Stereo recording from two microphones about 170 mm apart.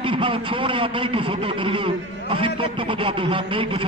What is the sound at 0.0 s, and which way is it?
A man's voice, 30° right (ahead or behind).